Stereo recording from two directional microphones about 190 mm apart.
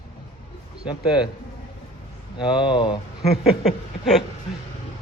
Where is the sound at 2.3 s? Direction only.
25° left (ahead or behind).